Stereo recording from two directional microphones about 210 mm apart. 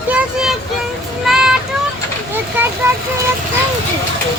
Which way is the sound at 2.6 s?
10° right (ahead or behind).